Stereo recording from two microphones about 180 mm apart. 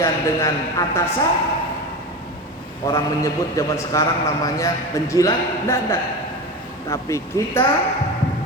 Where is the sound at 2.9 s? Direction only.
20° left (ahead or behind).